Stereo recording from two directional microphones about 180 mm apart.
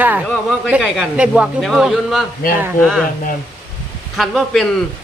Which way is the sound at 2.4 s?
55° left (ahead or behind).